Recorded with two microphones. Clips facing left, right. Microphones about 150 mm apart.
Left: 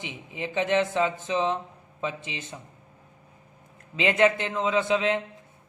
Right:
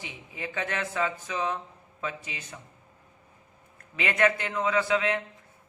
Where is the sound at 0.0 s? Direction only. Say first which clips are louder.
Left 4 dB; 20° left (ahead or behind).